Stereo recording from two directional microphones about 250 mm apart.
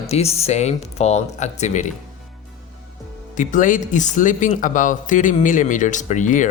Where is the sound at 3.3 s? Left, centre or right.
Left.